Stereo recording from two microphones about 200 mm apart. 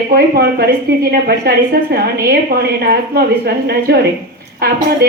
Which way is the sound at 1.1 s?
50° right (ahead or behind).